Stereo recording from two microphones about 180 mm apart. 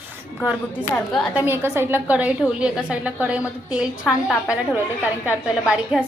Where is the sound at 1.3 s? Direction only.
15° right (ahead or behind).